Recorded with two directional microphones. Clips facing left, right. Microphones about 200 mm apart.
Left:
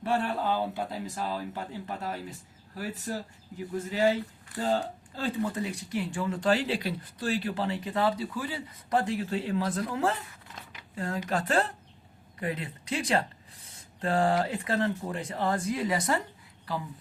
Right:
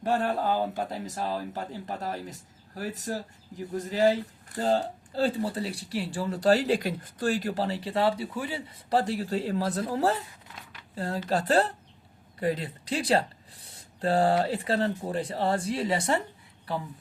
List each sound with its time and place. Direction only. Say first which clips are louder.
0.0 s speech: right 2 dB; 40° right (ahead or behind)